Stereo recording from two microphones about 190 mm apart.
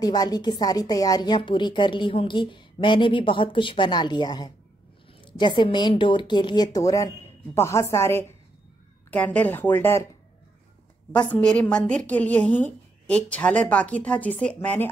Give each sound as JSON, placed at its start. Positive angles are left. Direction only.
{"t": 0.0, "sound": "a woman's voice", "side_deg": 20}
{"t": 11.1, "sound": "a woman's voice", "side_deg": 5}